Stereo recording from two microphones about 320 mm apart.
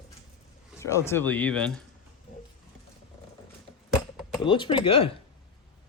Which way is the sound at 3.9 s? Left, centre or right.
Centre.